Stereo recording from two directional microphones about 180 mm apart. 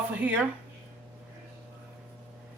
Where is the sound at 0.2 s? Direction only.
10° right (ahead or behind).